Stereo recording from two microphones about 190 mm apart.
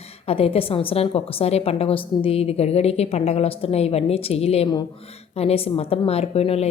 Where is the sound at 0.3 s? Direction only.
30° left (ahead or behind).